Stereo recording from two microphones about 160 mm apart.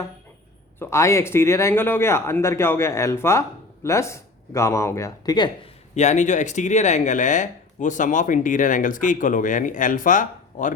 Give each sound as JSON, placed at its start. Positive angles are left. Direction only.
{"t": 0.8, "sound": "speech", "side_deg": 20}
{"t": 5.9, "sound": "speech", "side_deg": 45}